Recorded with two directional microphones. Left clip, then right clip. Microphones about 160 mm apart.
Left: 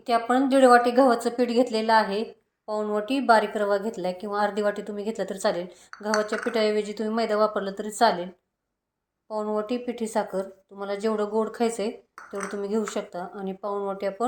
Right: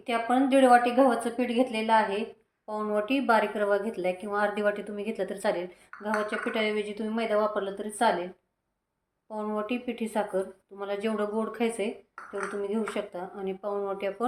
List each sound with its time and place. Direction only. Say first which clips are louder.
0.0 s speech: left 3 dB; 40° left (ahead or behind)
9.3 s speech: left 4 dB; 35° left (ahead or behind)